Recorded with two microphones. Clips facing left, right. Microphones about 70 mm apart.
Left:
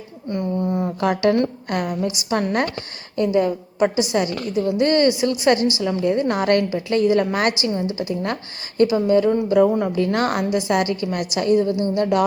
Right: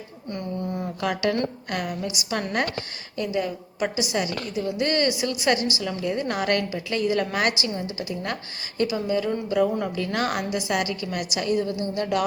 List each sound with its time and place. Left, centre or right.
0.3 s a sound: left
1.1 s a woman's voice: left
9.3 s a woman's voice: left